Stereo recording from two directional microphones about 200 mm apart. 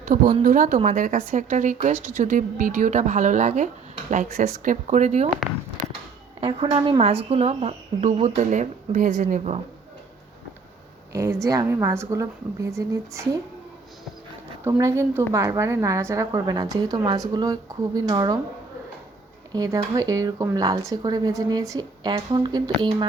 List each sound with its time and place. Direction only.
0.1 s a woman's voice: 40° right (ahead or behind)
5.8 s a sound: 40° right (ahead or behind)
6.4 s a woman's voice: 25° right (ahead or behind)
11.1 s a woman's voice: 15° right (ahead or behind)
14.6 s a woman's voice: 15° right (ahead or behind)
19.5 s speech: 20° right (ahead or behind)